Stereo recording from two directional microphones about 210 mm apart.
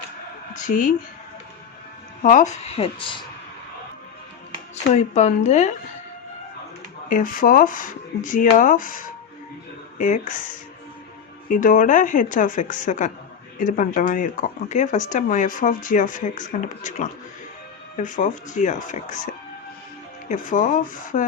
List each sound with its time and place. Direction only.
0.5 s a woman's voice: 40° left (ahead or behind)
2.2 s speech: 35° left (ahead or behind)
4.9 s speech: 30° left (ahead or behind)
7.1 s speech: 40° left (ahead or behind)
11.4 s speech: 40° left (ahead or behind)